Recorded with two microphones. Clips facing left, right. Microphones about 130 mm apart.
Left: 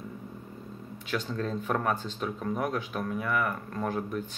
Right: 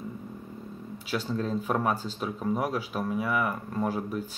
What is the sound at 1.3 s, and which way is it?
Speech, 10° right (ahead or behind).